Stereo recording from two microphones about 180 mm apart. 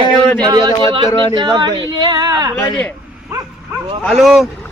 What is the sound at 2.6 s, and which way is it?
Speech, 15° left (ahead or behind).